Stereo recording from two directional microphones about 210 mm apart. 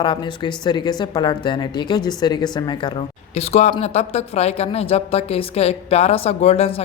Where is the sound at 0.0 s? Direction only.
20° left (ahead or behind).